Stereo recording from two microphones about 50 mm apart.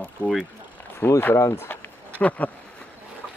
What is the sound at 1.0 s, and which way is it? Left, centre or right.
Speech, left.